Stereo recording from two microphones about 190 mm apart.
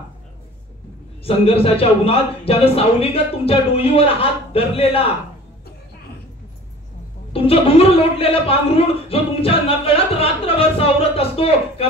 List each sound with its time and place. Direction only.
1.2 s a man's voice: 30° left (ahead or behind)
7.3 s a man's voice: 30° left (ahead or behind)